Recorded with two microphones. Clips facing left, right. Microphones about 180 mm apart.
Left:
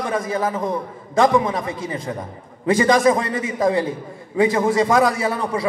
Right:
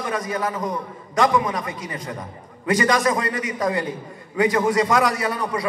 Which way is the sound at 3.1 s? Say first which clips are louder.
Left 2 dB; 30° left (ahead or behind).